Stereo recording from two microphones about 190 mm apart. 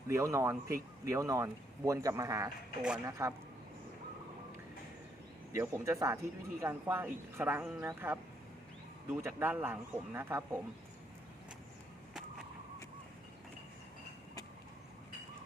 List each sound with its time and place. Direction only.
0.1 s speech: 15° right (ahead or behind)
2.8 s speech: 5° right (ahead or behind)
3.1 s speech: 15° right (ahead or behind)
5.5 s speech: 15° right (ahead or behind)